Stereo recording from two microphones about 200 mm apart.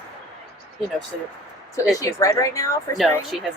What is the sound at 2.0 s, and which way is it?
Speech, 15° left (ahead or behind).